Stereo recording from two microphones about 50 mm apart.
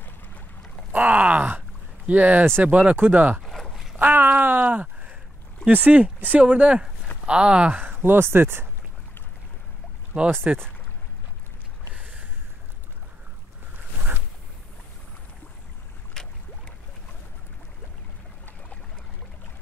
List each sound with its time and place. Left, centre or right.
0.9 s speech: right
4.1 s a sound: right
5.7 s speech: right
7.7 s speech: right
10.1 s speech: right
11.9 s a sound: right
16.1 s boat: centre